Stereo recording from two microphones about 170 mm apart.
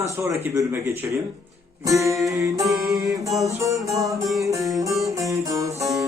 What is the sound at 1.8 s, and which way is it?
Music, 20° right (ahead or behind).